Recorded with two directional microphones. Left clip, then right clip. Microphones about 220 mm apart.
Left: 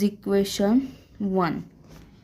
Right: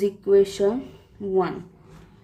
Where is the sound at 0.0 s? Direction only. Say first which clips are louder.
Right 6 dB; 40° left (ahead or behind).